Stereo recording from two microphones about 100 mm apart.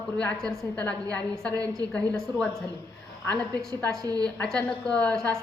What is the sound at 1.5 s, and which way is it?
Speech, 35° right (ahead or behind).